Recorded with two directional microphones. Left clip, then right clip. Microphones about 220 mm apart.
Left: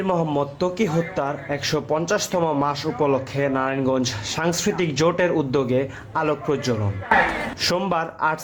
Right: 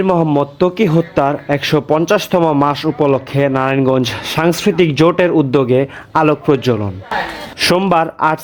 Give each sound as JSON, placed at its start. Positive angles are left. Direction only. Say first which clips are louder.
{"t": 0.0, "sound": "speech", "louder": "right 8 dB", "side_deg": -35}